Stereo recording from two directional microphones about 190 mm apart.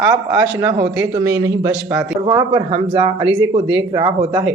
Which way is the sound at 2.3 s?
25° right (ahead or behind).